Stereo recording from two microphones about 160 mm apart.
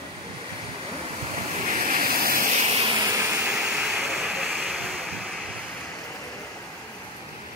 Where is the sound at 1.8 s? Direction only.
65° right (ahead or behind).